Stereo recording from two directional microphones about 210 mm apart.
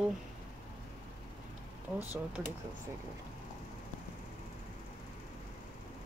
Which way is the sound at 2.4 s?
5° right (ahead or behind).